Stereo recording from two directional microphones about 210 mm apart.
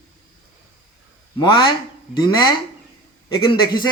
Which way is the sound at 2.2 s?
20° left (ahead or behind).